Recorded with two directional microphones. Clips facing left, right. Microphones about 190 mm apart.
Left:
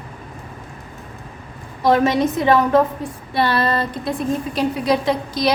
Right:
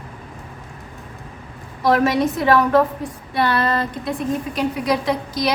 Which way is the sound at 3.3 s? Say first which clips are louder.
Left 1 dB; 30° left (ahead or behind).